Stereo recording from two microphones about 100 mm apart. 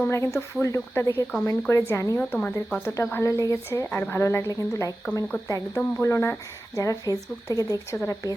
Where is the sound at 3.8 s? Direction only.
20° left (ahead or behind).